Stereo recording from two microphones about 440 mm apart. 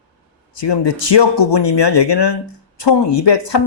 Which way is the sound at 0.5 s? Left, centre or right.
Left.